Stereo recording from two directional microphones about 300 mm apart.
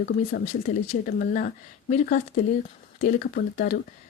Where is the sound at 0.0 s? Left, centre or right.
Left.